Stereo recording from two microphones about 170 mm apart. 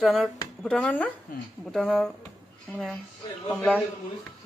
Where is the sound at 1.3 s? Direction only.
55° left (ahead or behind).